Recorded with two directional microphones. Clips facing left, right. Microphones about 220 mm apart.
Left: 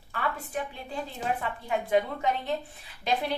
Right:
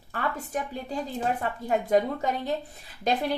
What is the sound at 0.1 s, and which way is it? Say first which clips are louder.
A woman's voice: right 2 dB; 40° right (ahead or behind).